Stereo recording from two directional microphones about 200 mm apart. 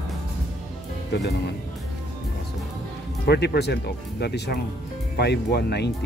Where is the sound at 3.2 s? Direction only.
55° left (ahead or behind).